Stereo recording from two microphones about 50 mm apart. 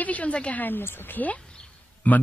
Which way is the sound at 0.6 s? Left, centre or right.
Left.